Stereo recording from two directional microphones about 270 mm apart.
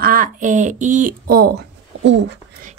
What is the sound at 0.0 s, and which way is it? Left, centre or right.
Speech, right.